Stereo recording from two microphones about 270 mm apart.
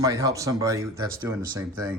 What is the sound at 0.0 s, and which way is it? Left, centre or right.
Speech, centre.